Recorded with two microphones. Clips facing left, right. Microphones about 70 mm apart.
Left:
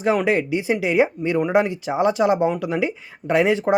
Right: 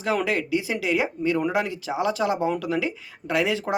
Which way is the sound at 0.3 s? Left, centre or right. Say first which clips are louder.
Left 5 dB; left.